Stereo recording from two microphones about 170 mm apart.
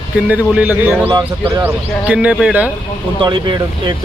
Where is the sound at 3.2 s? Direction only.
25° right (ahead or behind).